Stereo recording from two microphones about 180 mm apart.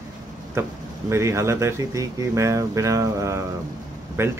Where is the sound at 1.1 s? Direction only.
15° right (ahead or behind).